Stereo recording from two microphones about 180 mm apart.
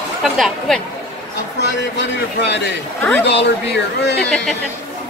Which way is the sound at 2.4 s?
75° left (ahead or behind).